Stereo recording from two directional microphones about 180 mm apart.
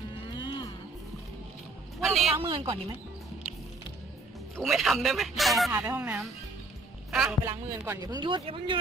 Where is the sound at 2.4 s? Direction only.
30° right (ahead or behind).